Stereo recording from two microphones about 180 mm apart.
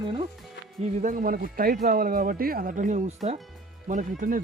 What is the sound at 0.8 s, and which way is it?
Speech, 40° right (ahead or behind).